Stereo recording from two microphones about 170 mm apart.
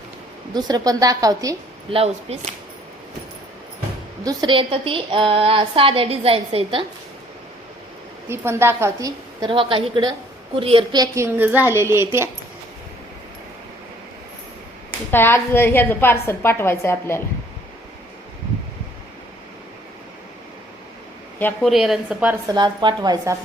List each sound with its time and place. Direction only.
0.5 s a woman's voice: 20° right (ahead or behind)
1.9 s a woman's voice: 35° right (ahead or behind)
4.2 s a woman's voice: 20° right (ahead or behind)
8.3 s a woman's voice: 15° right (ahead or behind)
15.1 s a woman's voice: 15° left (ahead or behind)
21.3 s speech: 10° left (ahead or behind)
21.7 s a woman's voice: centre (ahead or behind)
22.4 s a woman's voice: 25° right (ahead or behind)